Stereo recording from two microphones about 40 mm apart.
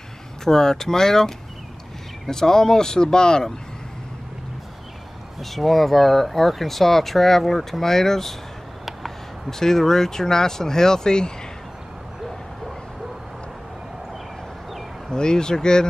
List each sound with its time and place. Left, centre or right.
0.5 s speech: centre
5.4 s speech: centre
9.5 s speech: centre
15.0 s speech: centre